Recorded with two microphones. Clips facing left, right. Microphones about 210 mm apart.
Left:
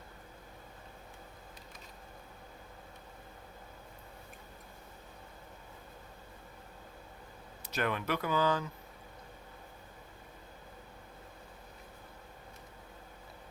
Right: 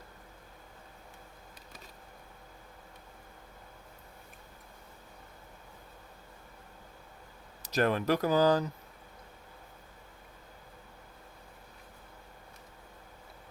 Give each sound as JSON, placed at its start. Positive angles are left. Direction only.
{"t": 7.6, "sound": "speech", "side_deg": -40}